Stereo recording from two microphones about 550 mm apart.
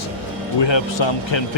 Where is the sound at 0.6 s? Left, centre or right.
Left.